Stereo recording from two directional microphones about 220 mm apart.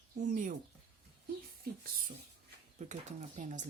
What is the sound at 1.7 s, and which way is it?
Speech, 45° right (ahead or behind).